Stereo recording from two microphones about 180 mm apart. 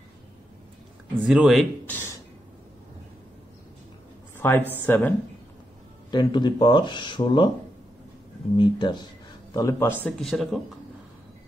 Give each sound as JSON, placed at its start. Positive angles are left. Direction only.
{"t": 1.2, "sound": "speech", "side_deg": -5}
{"t": 4.4, "sound": "a man's voice", "side_deg": 10}
{"t": 6.1, "sound": "speech", "side_deg": 25}
{"t": 8.5, "sound": "a man's voice", "side_deg": 25}
{"t": 10.0, "sound": "speech", "side_deg": 0}